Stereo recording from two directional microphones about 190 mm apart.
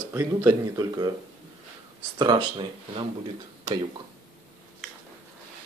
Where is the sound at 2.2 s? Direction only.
25° right (ahead or behind).